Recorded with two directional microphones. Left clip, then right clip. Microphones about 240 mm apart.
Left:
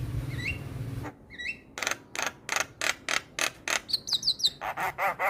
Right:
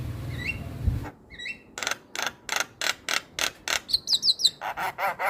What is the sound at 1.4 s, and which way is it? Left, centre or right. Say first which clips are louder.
Camera: even; right.